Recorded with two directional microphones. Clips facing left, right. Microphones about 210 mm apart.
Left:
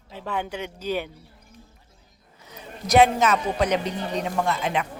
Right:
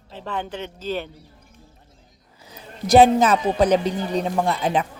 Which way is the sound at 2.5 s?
30° right (ahead or behind).